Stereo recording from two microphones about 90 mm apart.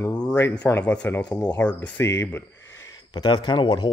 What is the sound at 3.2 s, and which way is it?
Speech, 50° left (ahead or behind).